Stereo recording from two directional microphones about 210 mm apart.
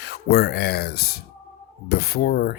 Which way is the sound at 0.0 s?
50° left (ahead or behind).